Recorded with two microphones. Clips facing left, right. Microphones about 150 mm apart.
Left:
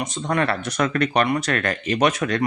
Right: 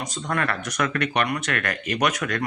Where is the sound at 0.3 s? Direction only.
25° left (ahead or behind).